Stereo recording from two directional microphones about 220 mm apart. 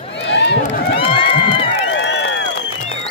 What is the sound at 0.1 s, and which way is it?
Run, 55° left (ahead or behind).